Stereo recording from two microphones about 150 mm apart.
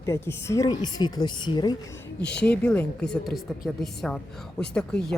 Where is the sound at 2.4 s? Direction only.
5° left (ahead or behind).